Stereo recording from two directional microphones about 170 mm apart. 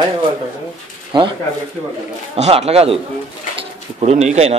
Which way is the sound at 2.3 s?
40° right (ahead or behind).